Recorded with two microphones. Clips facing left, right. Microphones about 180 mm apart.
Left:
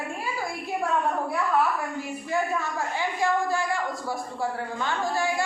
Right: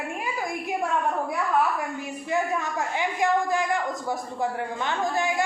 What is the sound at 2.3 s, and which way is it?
A man's voice, 20° right (ahead or behind).